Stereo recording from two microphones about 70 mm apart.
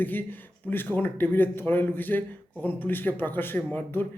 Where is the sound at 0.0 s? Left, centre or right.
Left.